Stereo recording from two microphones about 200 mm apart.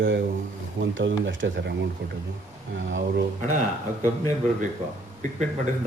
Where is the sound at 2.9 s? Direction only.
70° right (ahead or behind).